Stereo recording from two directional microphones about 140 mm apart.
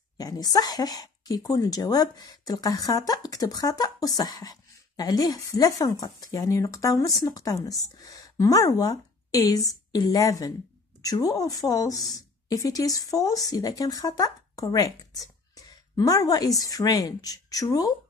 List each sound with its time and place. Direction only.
0.2 s a woman's voice: 25° left (ahead or behind)